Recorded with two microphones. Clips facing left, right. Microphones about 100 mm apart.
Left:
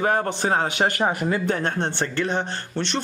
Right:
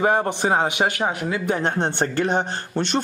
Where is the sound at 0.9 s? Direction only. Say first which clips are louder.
Left 1 dB; centre (ahead or behind).